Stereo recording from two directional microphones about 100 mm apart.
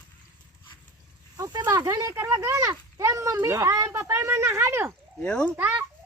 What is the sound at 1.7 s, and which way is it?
Speech, 35° right (ahead or behind).